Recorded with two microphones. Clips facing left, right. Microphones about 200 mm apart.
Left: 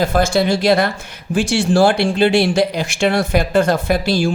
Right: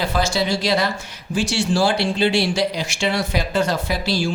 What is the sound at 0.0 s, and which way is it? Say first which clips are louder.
Speech: left 6 dB; 50° left (ahead or behind).